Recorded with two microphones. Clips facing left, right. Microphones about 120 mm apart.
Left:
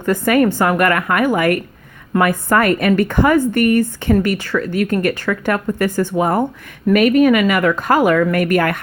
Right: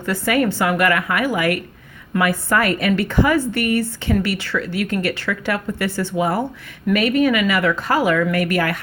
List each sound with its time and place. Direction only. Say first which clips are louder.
0.0 s a woman's voice: left 5 dB; 50° left (ahead or behind)